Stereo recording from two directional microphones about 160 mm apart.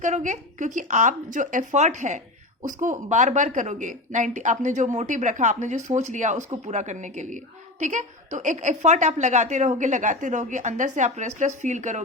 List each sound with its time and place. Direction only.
0.0 s speech: 50° right (ahead or behind)